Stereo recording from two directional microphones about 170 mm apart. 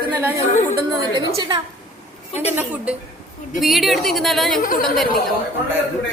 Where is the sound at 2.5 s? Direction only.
10° right (ahead or behind).